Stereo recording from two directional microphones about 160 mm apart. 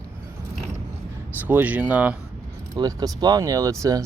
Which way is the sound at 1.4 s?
10° right (ahead or behind).